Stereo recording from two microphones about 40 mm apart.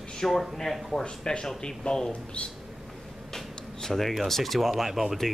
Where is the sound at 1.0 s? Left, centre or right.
Left.